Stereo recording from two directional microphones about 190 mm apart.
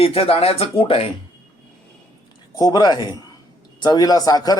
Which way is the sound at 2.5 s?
20° left (ahead or behind).